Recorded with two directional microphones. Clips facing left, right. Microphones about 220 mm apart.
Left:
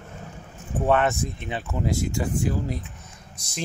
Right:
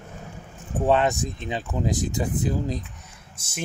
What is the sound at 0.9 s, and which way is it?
Speech, 15° right (ahead or behind).